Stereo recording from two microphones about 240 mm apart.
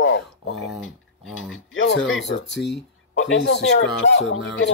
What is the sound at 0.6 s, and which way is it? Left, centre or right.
Speech, centre.